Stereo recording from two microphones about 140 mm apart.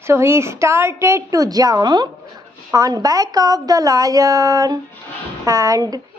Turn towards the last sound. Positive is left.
turn(degrees=-25)  # may be behind; listen again after turning